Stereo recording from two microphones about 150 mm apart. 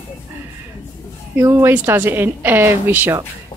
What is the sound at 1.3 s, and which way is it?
A woman's voice, 15° right (ahead or behind).